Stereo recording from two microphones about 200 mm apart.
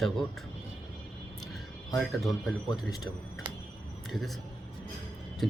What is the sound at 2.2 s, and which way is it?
Speech, centre (ahead or behind).